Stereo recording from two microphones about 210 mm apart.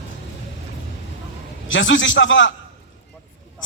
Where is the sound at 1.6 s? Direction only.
65° left (ahead or behind).